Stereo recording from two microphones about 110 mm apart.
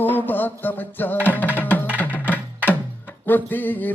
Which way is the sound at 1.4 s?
15° left (ahead or behind).